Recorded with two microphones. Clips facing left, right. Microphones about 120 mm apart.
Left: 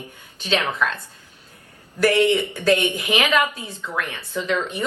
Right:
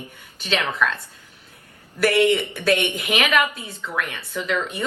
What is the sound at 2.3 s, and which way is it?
A woman's voice, 15° left (ahead or behind).